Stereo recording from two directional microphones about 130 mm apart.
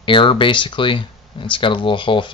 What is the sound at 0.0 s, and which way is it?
Speech, 40° left (ahead or behind).